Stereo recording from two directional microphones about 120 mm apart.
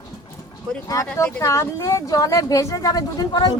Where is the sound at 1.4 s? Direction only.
25° left (ahead or behind).